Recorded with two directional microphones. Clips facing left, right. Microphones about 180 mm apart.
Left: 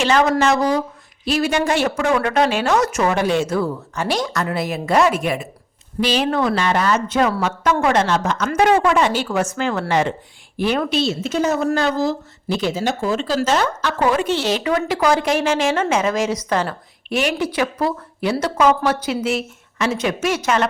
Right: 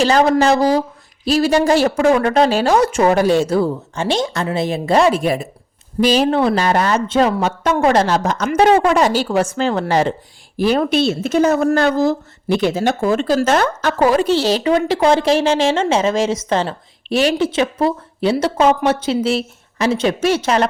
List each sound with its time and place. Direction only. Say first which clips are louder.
0.0 s speech: right 3 dB; 35° right (ahead or behind)
10.9 s speech: right 4 dB; 55° right (ahead or behind)
14.0 s a woman's voice: right 4 dB; 35° right (ahead or behind)